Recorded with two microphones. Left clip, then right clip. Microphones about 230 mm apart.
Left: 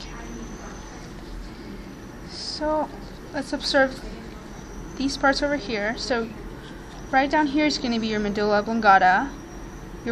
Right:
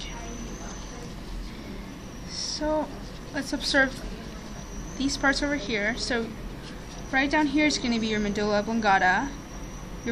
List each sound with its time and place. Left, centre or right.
2.4 s a sound: centre
3.3 s a woman's voice: centre
4.9 s a woman's voice: left